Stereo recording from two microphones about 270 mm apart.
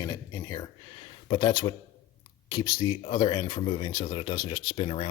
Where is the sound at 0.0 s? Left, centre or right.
Centre.